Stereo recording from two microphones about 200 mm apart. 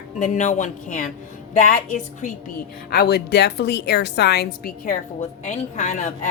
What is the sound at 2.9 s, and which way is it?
A woman's voice, 50° left (ahead or behind).